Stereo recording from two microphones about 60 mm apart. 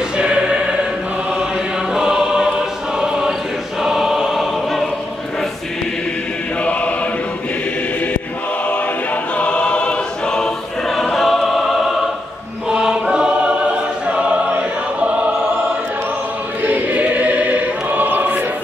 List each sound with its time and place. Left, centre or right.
0.2 s choir: centre
2.0 s choir: centre
3.8 s choir: centre
6.6 s choir: left
9.4 s choir: centre
12.6 s choir: centre
16.6 s choir: right